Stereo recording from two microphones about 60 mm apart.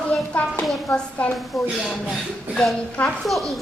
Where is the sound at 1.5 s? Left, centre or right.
Centre.